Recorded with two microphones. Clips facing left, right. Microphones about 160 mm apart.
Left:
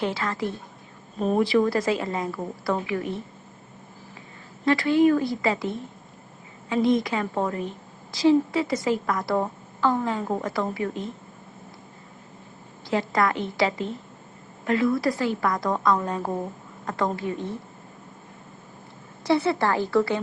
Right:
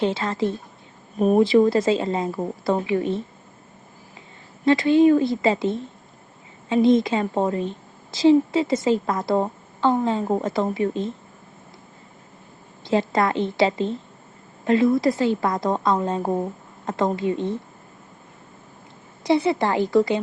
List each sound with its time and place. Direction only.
0.0 s a woman's voice: 25° right (ahead or behind)
4.6 s a woman's voice: 25° right (ahead or behind)
12.9 s a woman's voice: 25° right (ahead or behind)
19.2 s a woman's voice: 15° right (ahead or behind)